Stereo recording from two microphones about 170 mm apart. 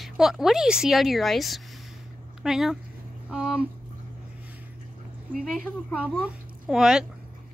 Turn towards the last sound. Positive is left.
turn(degrees=-5)  # may be behind; listen again after turning